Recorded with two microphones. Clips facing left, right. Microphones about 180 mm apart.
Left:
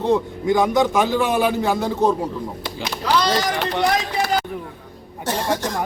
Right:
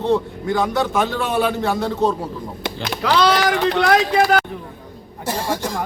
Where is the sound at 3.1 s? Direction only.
70° right (ahead or behind).